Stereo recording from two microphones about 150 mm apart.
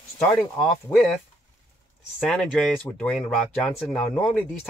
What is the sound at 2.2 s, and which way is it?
Speech, centre (ahead or behind).